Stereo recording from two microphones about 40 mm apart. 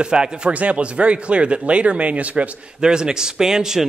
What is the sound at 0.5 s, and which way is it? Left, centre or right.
Speech, right.